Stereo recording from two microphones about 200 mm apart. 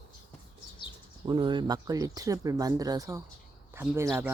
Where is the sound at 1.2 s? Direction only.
25° right (ahead or behind).